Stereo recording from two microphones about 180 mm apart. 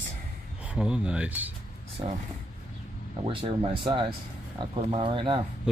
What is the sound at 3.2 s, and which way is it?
Speech, 30° right (ahead or behind).